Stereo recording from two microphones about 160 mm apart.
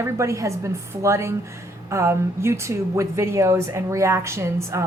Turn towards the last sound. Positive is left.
turn(degrees=-15)  # may be behind; listen again after turning